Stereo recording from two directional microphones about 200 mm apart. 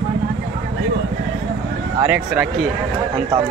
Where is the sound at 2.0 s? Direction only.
10° right (ahead or behind).